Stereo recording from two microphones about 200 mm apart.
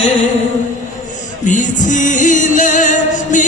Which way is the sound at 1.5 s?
40° left (ahead or behind).